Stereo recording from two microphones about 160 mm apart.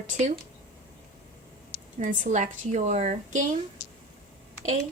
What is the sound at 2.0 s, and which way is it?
A woman's voice, 50° right (ahead or behind).